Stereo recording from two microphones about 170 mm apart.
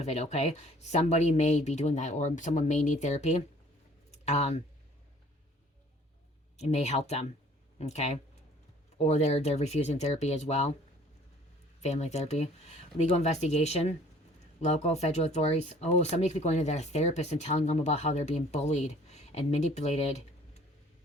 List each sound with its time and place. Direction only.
0.0 s speech: 40° left (ahead or behind)
6.6 s speech: 40° left (ahead or behind)
11.8 s speech: 40° left (ahead or behind)